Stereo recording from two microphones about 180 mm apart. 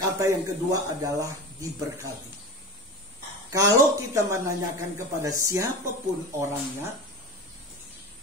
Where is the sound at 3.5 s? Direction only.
15° right (ahead or behind).